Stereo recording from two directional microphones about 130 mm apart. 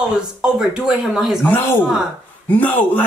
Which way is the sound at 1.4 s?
15° left (ahead or behind).